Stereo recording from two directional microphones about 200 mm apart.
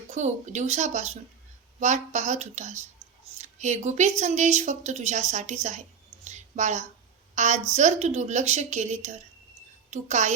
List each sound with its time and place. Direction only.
0.1 s a woman's voice: 35° right (ahead or behind)
6.2 s a sound: 35° right (ahead or behind)
7.3 s a woman's voice: 35° right (ahead or behind)